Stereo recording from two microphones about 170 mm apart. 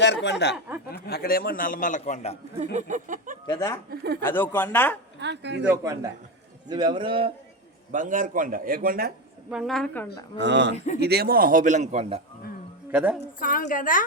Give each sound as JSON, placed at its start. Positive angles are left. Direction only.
{"t": 0.0, "sound": "speech", "side_deg": 90}
{"t": 0.9, "sound": "a man's voice", "side_deg": 65}
{"t": 2.7, "sound": "a sound", "side_deg": -50}
{"t": 3.4, "sound": "speech", "side_deg": 15}
{"t": 5.2, "sound": "speech", "side_deg": -90}
{"t": 5.6, "sound": "speech", "side_deg": -15}
{"t": 7.9, "sound": "a man's voice", "side_deg": -50}
{"t": 9.5, "sound": "a woman's voice", "side_deg": 0}
{"t": 10.3, "sound": "speech", "side_deg": -90}
{"t": 11.0, "sound": "a man's voice", "side_deg": -70}
{"t": 12.9, "sound": "a woman's voice", "side_deg": -10}
{"t": 13.4, "sound": "a woman's voice", "side_deg": 55}